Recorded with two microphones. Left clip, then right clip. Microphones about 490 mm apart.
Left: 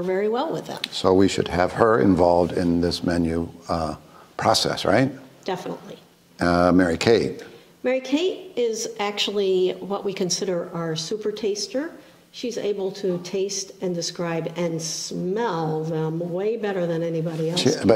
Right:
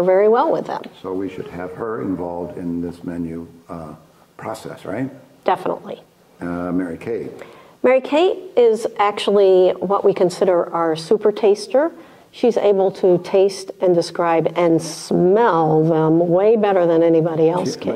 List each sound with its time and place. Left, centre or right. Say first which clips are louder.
0.0 s speech: right 10 dB; right
0.7 s speech: left 7 dB; left
5.4 s a woman's voice: right 11 dB; right
6.4 s speech: left 6 dB; left
7.8 s a woman's voice: right 8 dB; right